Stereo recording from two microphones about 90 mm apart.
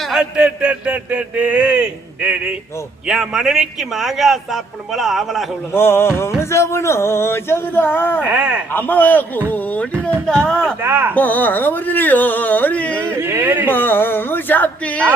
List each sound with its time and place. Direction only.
0.0 s a man's voice: 5° right (ahead or behind)
5.7 s speech: 25° left (ahead or behind)
8.2 s a man's voice: 15° right (ahead or behind)
8.7 s speech: 20° left (ahead or behind)
9.9 s speech: 25° right (ahead or behind)
10.2 s speech: 10° left (ahead or behind)
10.8 s speech: 25° right (ahead or behind)
11.1 s speech: 20° left (ahead or behind)
13.1 s speech: 25° right (ahead or behind)
13.7 s speech: 20° left (ahead or behind)